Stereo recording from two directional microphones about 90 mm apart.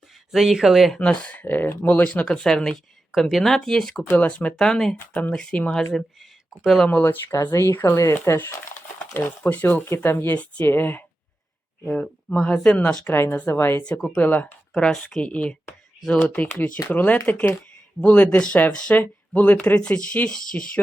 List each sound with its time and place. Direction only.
0.3 s speech: 5° right (ahead or behind)
0.9 s speech: 10° left (ahead or behind)
4.1 s speech: 15° left (ahead or behind)
6.8 s speech: 20° left (ahead or behind)
11.9 s speech: 5° left (ahead or behind)
13.1 s speech: 25° left (ahead or behind)
13.8 s speech: 10° left (ahead or behind)
16.2 s speech: 15° left (ahead or behind)